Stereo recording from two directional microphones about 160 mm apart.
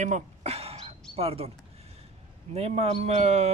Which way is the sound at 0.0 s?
45° right (ahead or behind).